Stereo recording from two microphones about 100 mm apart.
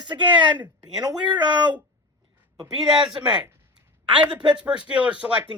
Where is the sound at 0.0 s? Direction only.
50° right (ahead or behind).